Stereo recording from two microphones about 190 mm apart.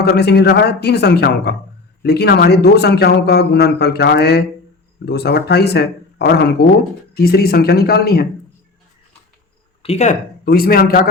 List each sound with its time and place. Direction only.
0.0 s speech: 60° left (ahead or behind)
9.8 s speech: 35° left (ahead or behind)
10.4 s a man's voice: 50° left (ahead or behind)